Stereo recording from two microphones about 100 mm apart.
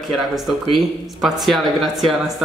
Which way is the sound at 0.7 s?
Centre (ahead or behind).